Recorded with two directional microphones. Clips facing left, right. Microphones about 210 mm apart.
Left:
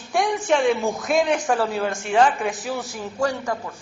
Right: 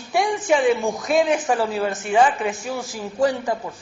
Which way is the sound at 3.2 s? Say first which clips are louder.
Right 4 dB; 15° right (ahead or behind).